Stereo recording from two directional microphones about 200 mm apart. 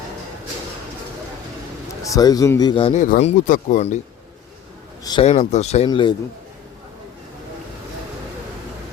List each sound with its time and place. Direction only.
2.0 s a man's voice: 15° left (ahead or behind)
2.9 s speech: 40° left (ahead or behind)
5.0 s speech: 25° left (ahead or behind)